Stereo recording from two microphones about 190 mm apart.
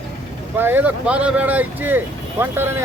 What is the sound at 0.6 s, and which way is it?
A man's voice, 10° right (ahead or behind).